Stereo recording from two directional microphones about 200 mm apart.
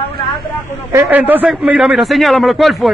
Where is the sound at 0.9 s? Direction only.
10° right (ahead or behind).